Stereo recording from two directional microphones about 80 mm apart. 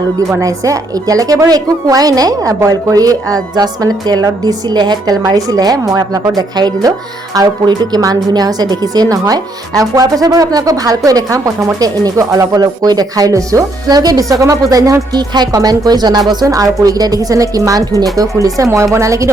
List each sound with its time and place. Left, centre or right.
0.4 s a woman's voice: right
15.1 s a woman's voice: right